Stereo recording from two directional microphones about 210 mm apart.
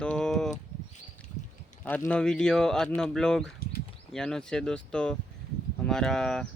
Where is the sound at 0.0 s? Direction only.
5° left (ahead or behind).